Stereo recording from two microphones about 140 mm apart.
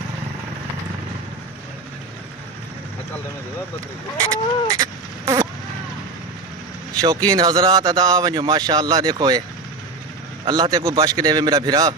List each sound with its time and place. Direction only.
4.3 s a sound: 25° right (ahead or behind)
7.0 s speech: 25° right (ahead or behind)
10.4 s speech: 30° right (ahead or behind)